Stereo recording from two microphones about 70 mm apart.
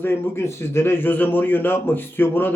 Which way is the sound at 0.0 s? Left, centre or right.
Left.